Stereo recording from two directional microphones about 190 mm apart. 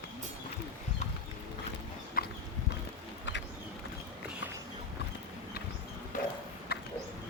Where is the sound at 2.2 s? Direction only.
50° left (ahead or behind).